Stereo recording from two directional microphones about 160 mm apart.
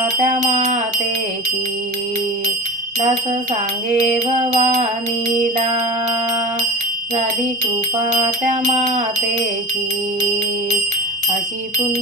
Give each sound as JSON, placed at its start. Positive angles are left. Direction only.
{"t": 0.3, "sound": "music", "side_deg": -50}
{"t": 4.5, "sound": "music", "side_deg": -45}
{"t": 8.1, "sound": "music", "side_deg": -50}